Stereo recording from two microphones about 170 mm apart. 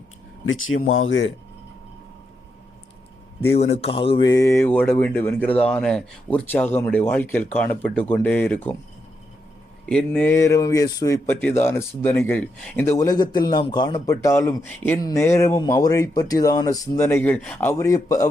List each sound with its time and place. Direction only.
0.7 s speech: 90° left
3.5 s speech: 40° left (ahead or behind)
4.3 s speech: 20° left (ahead or behind)
9.9 s speech: 5° left (ahead or behind)